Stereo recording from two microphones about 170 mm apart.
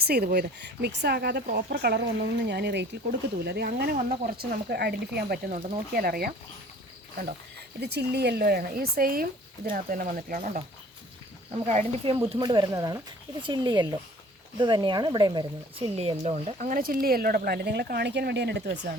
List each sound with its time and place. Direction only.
0.0 s speech: 65° right (ahead or behind)
3.9 s speech: 50° right (ahead or behind)
4.7 s speech: 70° right (ahead or behind)
5.5 s speech: 40° right (ahead or behind)
5.9 s speech: 60° right (ahead or behind)
7.8 s speech: 70° right (ahead or behind); by 10.6 s 50° right (ahead or behind)
11.6 s speech: 40° right (ahead or behind)
12.3 s speech: 25° right (ahead or behind); by 18.7 s 80° right